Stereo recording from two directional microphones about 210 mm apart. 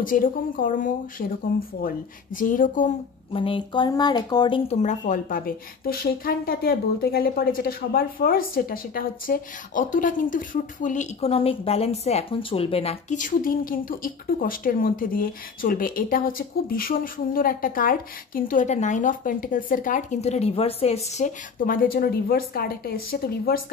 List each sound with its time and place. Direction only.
0.0 s speech: 40° left (ahead or behind)
3.3 s speech: 25° left (ahead or behind); by 23.6 s 45° left (ahead or behind)